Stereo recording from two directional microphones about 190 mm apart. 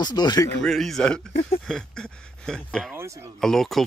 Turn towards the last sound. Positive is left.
turn(degrees=0)  # may be behind; listen again after turning